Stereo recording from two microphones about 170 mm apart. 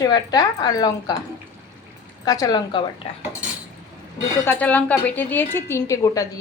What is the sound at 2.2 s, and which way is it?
Speech, 20° left (ahead or behind).